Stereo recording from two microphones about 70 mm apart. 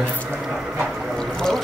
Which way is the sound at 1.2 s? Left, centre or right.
Centre.